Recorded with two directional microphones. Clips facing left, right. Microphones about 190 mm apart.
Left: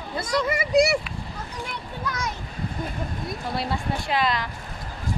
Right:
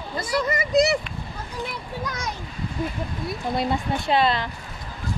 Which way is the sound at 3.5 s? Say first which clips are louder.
Right 4 dB; 20° right (ahead or behind).